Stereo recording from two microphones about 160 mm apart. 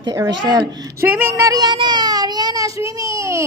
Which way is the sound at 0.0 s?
25° right (ahead or behind).